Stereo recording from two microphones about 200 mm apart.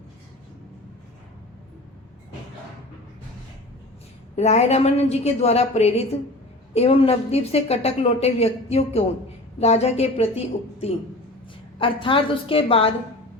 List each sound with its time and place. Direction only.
4.4 s a woman's voice: 35° left (ahead or behind)